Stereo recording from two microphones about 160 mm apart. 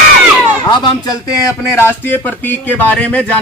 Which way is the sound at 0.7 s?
20° left (ahead or behind).